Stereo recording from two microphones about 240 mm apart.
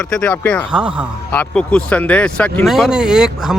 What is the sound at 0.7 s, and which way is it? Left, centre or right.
Speech, centre.